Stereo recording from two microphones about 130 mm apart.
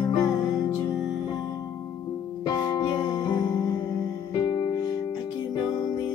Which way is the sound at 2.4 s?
30° left (ahead or behind).